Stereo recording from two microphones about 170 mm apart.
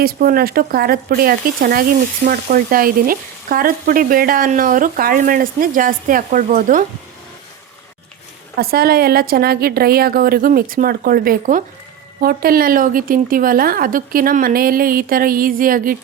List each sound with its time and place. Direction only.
0.0 s speech: 60° right (ahead or behind)
8.5 s speech: 65° right (ahead or behind)